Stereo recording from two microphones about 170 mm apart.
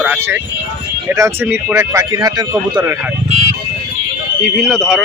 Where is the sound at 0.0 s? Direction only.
5° right (ahead or behind).